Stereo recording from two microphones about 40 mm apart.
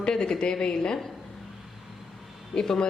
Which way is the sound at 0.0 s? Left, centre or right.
Centre.